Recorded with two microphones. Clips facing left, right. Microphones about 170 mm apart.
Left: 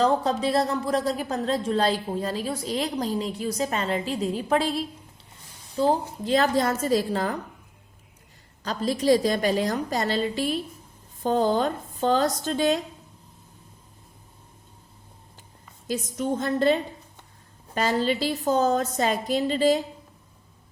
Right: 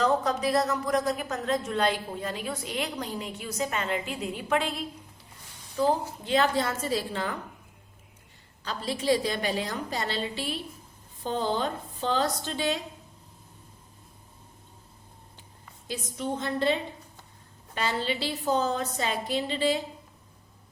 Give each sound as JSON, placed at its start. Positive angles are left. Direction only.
{"t": 0.0, "sound": "a woman's voice", "side_deg": 30}
{"t": 8.6, "sound": "a woman's voice", "side_deg": 40}
{"t": 15.9, "sound": "a woman's voice", "side_deg": 45}